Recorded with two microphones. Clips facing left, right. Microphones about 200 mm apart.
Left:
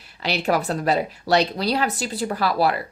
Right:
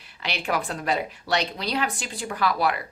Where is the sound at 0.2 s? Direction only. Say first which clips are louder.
Left 6 dB; 40° left (ahead or behind).